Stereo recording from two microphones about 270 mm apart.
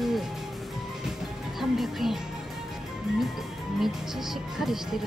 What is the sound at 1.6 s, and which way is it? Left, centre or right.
Music, centre.